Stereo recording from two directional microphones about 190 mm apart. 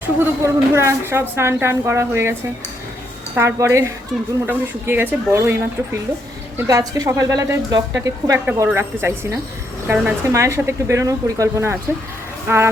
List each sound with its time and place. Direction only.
0.2 s a woman's voice: 15° right (ahead or behind)
3.3 s a woman's voice: 15° right (ahead or behind)